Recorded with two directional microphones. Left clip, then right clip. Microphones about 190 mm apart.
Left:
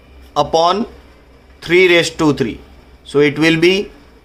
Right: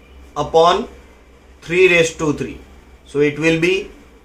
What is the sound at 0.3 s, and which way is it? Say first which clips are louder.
Speech: even; 50° left (ahead or behind).